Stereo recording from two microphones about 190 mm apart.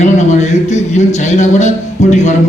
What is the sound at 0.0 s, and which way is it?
Speech, 35° left (ahead or behind).